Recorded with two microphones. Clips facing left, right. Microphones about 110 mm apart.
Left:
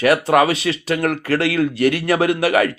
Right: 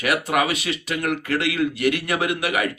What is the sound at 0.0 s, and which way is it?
Speech, 35° left (ahead or behind).